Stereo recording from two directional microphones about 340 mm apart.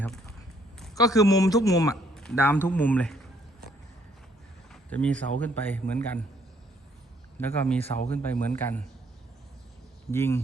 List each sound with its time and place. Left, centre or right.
0.8 s a man's voice: centre
4.7 s speech: centre
7.3 s speech: centre
7.9 s speech: centre
8.1 s speech: centre
10.1 s speech: centre